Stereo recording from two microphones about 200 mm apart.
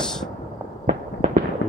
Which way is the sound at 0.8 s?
35° right (ahead or behind).